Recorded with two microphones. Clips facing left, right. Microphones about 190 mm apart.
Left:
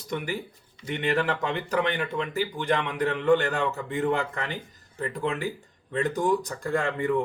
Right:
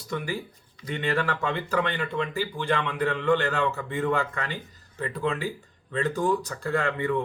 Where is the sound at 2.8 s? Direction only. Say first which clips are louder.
Left 1 dB; 20° left (ahead or behind).